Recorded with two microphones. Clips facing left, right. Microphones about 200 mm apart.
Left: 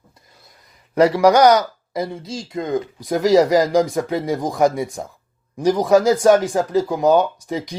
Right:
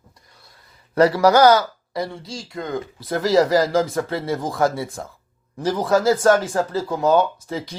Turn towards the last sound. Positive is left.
turn(degrees=15)  # may be behind; listen again after turning